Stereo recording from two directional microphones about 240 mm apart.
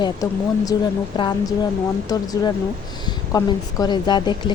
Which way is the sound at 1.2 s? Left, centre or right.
Centre.